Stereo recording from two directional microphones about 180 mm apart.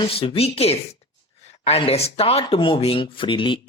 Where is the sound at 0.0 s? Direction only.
30° left (ahead or behind).